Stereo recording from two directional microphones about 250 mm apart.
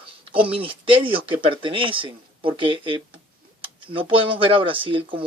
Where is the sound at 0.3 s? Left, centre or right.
Right.